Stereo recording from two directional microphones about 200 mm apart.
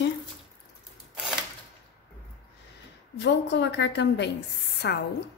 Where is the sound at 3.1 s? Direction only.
60° left (ahead or behind).